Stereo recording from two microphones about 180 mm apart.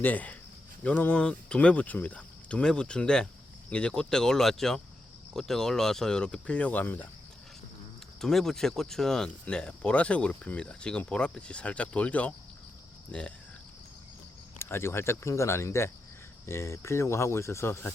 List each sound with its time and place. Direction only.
0.0 s speech: 10° left (ahead or behind)
8.2 s speech: centre (ahead or behind)
14.6 s speech: 15° left (ahead or behind)